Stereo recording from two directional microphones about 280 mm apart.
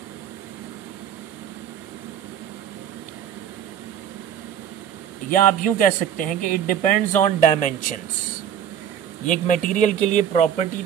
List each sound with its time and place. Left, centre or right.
5.3 s speech: left
9.2 s speech: left